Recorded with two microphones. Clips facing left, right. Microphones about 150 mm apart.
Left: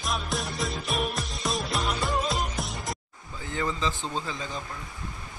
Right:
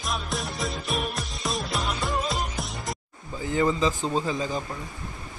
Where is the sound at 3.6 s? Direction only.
20° right (ahead or behind).